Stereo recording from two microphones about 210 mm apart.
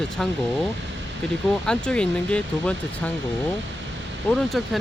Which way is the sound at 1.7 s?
5° left (ahead or behind).